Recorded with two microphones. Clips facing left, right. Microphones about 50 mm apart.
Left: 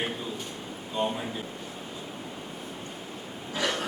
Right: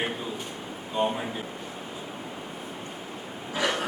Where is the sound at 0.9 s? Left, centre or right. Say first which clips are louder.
Right 3 dB; right.